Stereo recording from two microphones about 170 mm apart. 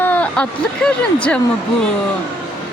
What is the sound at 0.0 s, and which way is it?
Speech, 10° left (ahead or behind).